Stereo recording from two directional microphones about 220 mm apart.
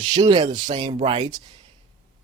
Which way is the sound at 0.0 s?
20° right (ahead or behind).